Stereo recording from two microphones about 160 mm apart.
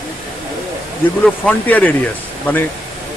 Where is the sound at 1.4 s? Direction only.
10° left (ahead or behind).